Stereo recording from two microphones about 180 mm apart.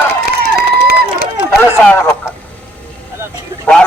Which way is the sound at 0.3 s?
60° left (ahead or behind).